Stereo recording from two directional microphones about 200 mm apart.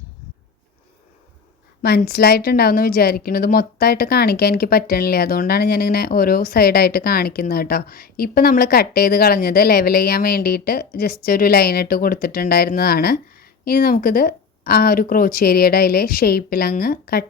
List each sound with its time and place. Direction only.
1.8 s a woman's voice: 50° left (ahead or behind)